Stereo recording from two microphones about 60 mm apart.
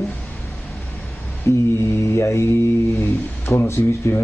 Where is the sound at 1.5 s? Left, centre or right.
Left.